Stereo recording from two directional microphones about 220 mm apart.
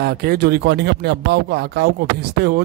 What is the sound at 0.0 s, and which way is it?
Speech, 45° right (ahead or behind).